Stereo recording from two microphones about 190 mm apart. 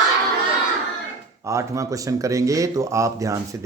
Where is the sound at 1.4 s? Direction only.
15° right (ahead or behind).